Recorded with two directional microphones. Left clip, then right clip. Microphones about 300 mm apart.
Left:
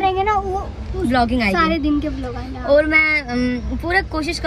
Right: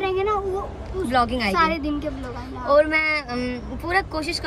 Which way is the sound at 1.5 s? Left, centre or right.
Centre.